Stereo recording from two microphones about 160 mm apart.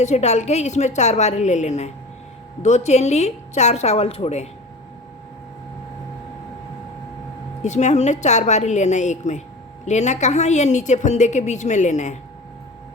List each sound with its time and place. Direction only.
0.0 s a woman's voice: 45° left (ahead or behind)
7.6 s a woman's voice: 45° left (ahead or behind)